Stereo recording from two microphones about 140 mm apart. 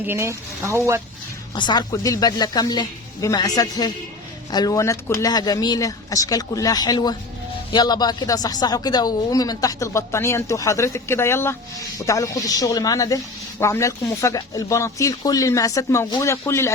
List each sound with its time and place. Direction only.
0.0 s speech: 15° right (ahead or behind)
1.5 s speech: 30° left (ahead or behind)